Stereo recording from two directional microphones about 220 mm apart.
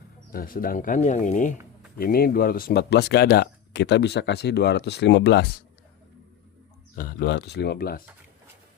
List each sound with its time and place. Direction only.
0.3 s speech: 40° left (ahead or behind)
6.9 s speech: 40° left (ahead or behind)